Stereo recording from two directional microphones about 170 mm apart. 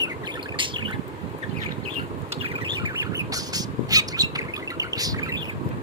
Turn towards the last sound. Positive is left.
turn(degrees=-20)  # may be behind; listen again after turning